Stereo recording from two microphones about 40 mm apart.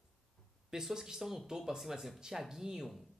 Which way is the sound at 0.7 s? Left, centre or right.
Centre.